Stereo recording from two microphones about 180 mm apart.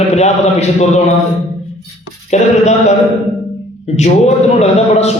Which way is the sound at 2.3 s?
40° left (ahead or behind).